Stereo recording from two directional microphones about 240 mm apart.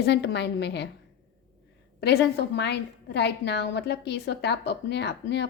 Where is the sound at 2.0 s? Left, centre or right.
Left.